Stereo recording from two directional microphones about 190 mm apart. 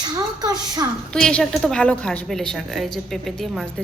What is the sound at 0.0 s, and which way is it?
Speech, 20° right (ahead or behind).